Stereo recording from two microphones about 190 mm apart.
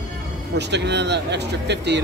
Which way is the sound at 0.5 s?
65° right (ahead or behind).